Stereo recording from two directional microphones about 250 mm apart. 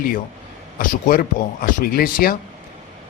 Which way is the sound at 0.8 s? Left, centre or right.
Left.